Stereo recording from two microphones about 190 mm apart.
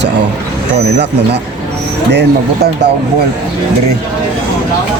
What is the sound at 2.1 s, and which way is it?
Speech, 60° right (ahead or behind).